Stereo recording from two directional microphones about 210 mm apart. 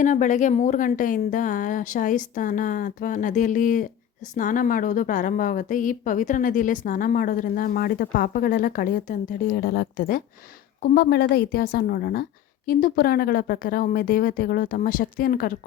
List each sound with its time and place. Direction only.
0.0 s a woman's voice: 35° left (ahead or behind)